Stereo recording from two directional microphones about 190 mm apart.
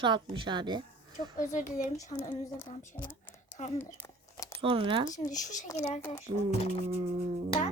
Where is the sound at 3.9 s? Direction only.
10° left (ahead or behind).